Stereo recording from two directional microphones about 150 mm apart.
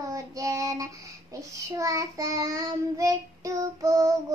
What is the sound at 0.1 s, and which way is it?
Child singing, 20° right (ahead or behind).